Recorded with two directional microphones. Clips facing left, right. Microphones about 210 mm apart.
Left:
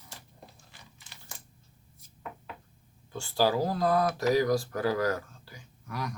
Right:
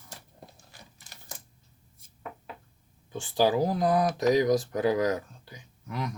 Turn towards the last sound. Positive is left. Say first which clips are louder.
# right 2 dB
turn(degrees=-20)  # may be behind; listen again after turning